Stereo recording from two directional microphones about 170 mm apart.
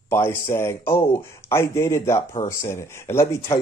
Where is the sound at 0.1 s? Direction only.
15° left (ahead or behind).